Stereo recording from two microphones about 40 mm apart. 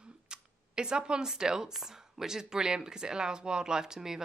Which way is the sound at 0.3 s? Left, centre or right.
Right.